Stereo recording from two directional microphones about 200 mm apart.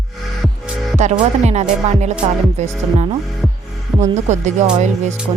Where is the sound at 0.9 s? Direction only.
35° right (ahead or behind).